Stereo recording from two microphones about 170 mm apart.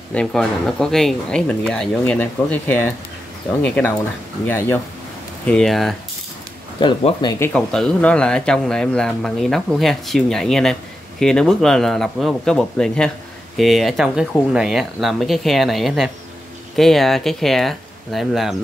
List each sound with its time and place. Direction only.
0.1 s speech: 5° left (ahead or behind)
6.8 s speech: 35° left (ahead or behind)
7.2 s speech: 15° left (ahead or behind); by 18.6 s centre (ahead or behind)